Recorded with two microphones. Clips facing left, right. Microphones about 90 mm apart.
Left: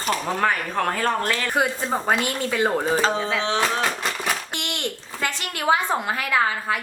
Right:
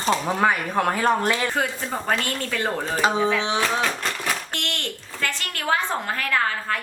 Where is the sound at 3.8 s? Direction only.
5° left (ahead or behind).